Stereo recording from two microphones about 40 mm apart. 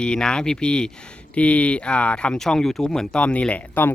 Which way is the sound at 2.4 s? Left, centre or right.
Centre.